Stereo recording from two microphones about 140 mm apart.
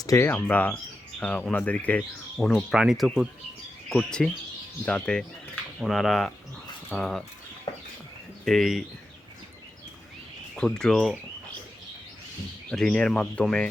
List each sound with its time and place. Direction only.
0.0 s speech: 25° left (ahead or behind)
0.3 s speech: 10° left (ahead or behind)
2.7 s speech: 5° right (ahead or behind)
8.4 s speech: centre (ahead or behind)
10.5 s speech: 5° left (ahead or behind)
12.7 s speech: 5° left (ahead or behind)